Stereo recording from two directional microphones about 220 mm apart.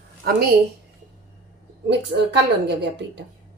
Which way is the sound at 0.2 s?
45° right (ahead or behind).